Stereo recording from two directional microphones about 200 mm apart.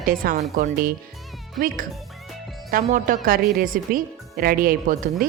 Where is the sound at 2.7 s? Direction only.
45° right (ahead or behind).